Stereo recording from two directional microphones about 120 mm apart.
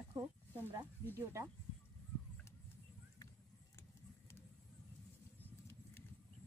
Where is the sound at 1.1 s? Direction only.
25° right (ahead or behind).